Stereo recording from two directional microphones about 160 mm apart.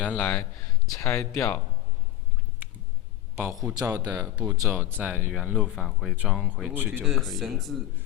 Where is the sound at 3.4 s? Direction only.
15° right (ahead or behind).